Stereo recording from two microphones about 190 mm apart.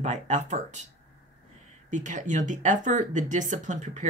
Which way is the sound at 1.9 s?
40° right (ahead or behind).